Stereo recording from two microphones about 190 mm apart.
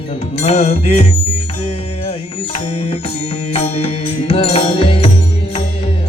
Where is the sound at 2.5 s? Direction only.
30° left (ahead or behind).